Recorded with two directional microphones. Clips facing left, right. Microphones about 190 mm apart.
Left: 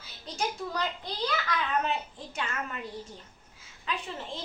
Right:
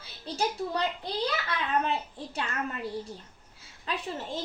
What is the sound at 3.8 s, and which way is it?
Speech, 40° right (ahead or behind).